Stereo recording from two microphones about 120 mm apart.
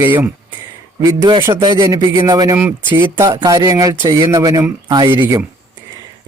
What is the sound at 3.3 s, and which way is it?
A man's voice, 30° right (ahead or behind).